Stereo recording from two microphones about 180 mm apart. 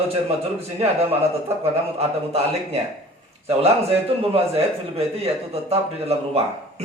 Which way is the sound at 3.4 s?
35° right (ahead or behind).